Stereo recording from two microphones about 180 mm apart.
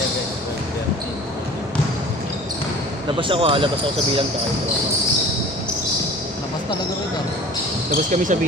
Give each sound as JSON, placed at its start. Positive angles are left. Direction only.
{"t": 3.2, "sound": "speech", "side_deg": -30}
{"t": 7.9, "sound": "speech", "side_deg": -45}